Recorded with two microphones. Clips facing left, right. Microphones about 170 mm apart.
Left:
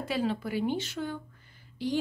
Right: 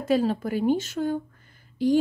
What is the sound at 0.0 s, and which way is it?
Speech, 45° right (ahead or behind).